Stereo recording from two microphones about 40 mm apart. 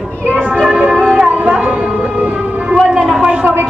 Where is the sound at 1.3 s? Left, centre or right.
Right.